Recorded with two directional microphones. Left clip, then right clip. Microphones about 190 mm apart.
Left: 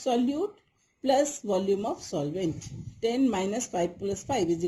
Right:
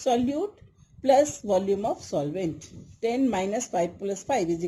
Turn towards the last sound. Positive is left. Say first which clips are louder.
# right 2 dB
turn(degrees=-35)  # may be behind; listen again after turning